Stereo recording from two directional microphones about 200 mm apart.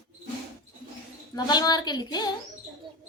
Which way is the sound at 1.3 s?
20° left (ahead or behind).